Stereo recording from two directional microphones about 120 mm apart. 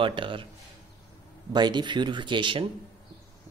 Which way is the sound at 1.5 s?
40° right (ahead or behind).